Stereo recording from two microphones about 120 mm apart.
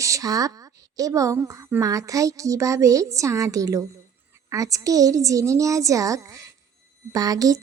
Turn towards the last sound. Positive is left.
turn(degrees=-30)  # may be behind; listen again after turning